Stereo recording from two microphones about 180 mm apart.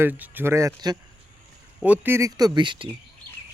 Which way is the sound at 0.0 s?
10° right (ahead or behind).